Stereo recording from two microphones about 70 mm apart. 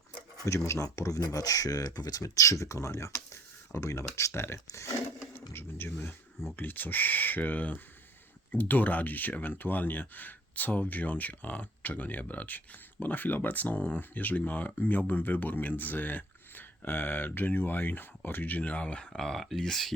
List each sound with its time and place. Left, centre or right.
0.4 s speech: left
5.3 s speech: left
19.1 s speech: centre